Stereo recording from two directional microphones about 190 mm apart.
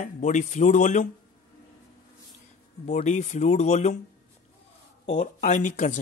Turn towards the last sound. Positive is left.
turn(degrees=40)  # may be behind; listen again after turning